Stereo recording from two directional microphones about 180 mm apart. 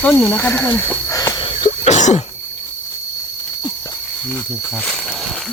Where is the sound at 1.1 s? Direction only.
20° left (ahead or behind); by 2.2 s 40° left (ahead or behind).